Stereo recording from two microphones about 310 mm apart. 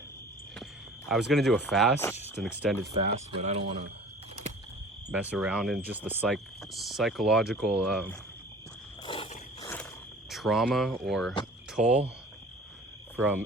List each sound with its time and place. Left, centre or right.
0.5 s cricket: centre
1.3 s speech: centre
3.0 s speech: right
5.1 s speech: centre
9.0 s a sound: centre
10.2 s speech: centre
13.1 s insect: centre